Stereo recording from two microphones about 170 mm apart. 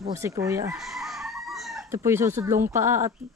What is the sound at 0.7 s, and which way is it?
Chicken, centre (ahead or behind).